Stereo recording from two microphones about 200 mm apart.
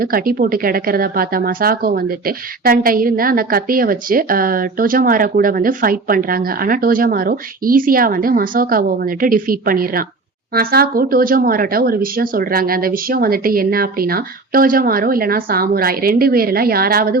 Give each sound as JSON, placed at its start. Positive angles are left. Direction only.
{"t": 0.0, "sound": "speech", "side_deg": -45}